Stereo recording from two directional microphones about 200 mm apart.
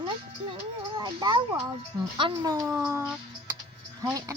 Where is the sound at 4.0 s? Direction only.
15° right (ahead or behind).